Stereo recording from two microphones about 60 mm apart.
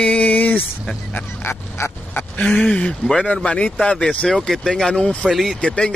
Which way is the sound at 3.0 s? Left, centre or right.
Centre.